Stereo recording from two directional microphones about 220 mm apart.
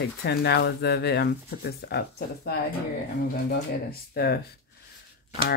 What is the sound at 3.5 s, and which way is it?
Speech, 45° left (ahead or behind).